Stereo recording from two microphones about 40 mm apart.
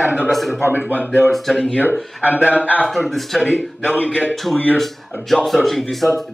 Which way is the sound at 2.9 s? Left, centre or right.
Centre.